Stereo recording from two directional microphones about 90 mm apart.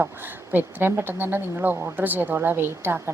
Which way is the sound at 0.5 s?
25° right (ahead or behind).